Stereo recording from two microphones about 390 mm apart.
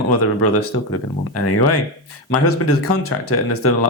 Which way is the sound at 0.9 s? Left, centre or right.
Left.